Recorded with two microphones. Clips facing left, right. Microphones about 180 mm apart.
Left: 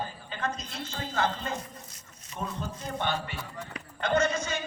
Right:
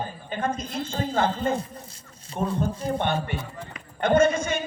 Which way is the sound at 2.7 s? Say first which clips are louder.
Right 9 dB; 30° right (ahead or behind).